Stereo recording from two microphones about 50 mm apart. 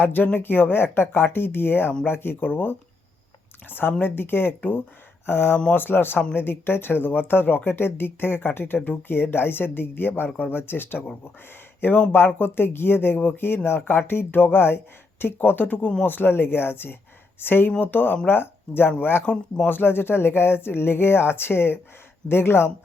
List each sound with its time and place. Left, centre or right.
0.0 s speech: left